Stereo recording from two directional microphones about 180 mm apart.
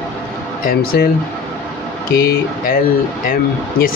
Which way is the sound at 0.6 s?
55° left (ahead or behind).